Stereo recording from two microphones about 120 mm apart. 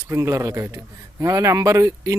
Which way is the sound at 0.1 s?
25° right (ahead or behind).